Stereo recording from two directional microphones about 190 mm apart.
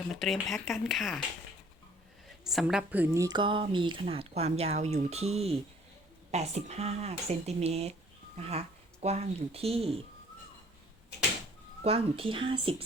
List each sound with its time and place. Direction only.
0.1 s speech: centre (ahead or behind)
2.4 s a woman's voice: centre (ahead or behind); by 10.0 s 30° right (ahead or behind)
11.8 s a woman's voice: 30° right (ahead or behind)